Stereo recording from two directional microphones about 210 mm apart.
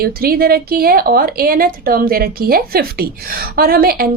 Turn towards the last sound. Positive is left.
turn(degrees=-45)  # may be behind; listen again after turning